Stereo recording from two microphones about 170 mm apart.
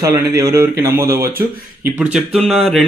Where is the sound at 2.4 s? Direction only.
Centre (ahead or behind).